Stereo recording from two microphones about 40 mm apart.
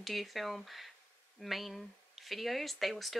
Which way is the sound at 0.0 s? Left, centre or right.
Centre.